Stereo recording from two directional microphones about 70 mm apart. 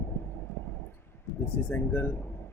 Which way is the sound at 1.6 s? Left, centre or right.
Left.